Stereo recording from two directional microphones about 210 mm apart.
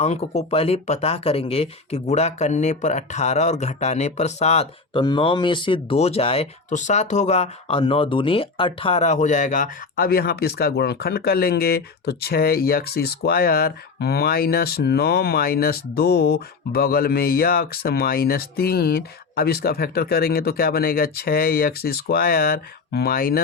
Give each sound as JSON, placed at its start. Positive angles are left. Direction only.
{"t": 0.0, "sound": "speech", "side_deg": 30}